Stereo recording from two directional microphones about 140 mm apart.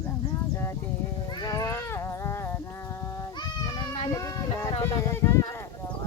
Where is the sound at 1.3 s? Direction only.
30° left (ahead or behind).